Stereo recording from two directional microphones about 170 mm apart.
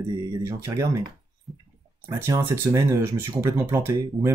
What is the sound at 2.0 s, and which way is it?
Speech, 15° right (ahead or behind).